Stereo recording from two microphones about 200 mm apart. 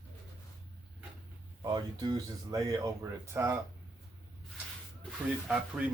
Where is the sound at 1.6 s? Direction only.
20° right (ahead or behind).